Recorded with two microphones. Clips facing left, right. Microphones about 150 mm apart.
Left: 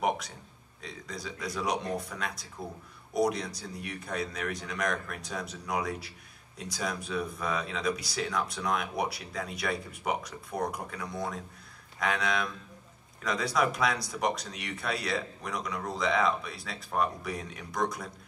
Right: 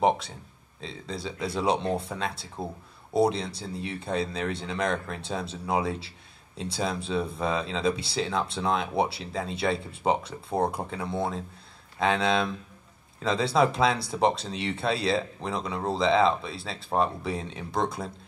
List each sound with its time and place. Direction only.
0.7 s speech: 25° right (ahead or behind)